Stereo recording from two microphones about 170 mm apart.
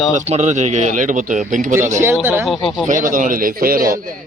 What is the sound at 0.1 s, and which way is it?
Speech, 45° right (ahead or behind).